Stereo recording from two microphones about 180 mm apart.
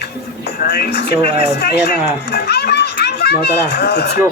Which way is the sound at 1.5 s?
65° left (ahead or behind).